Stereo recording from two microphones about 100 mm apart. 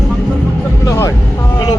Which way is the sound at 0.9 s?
35° left (ahead or behind).